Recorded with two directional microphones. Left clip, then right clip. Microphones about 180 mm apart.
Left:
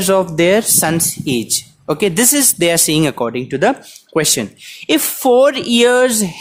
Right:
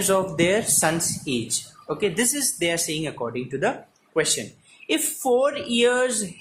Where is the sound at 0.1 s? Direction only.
50° left (ahead or behind).